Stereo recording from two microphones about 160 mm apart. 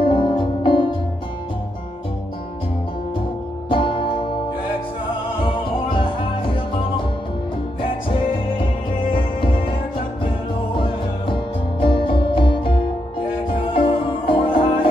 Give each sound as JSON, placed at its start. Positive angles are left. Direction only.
{"t": 0.0, "sound": "music", "side_deg": 30}
{"t": 3.6, "sound": "music", "side_deg": 35}
{"t": 9.1, "sound": "music", "side_deg": 30}
{"t": 10.8, "sound": "music", "side_deg": 35}